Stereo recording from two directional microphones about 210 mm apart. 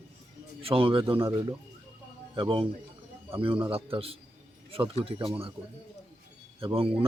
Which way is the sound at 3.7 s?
25° right (ahead or behind).